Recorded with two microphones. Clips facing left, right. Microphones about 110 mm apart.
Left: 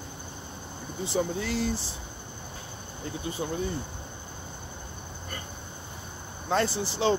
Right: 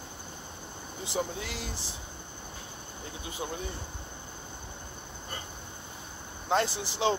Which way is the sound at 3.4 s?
15° right (ahead or behind).